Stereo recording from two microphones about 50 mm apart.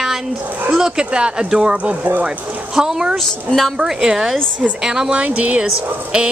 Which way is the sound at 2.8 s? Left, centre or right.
Centre.